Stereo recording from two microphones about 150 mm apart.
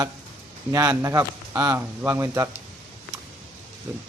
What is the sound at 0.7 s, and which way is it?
Speech, 20° right (ahead or behind).